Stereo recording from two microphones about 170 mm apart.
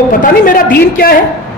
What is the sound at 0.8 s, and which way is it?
Speech, 60° left (ahead or behind).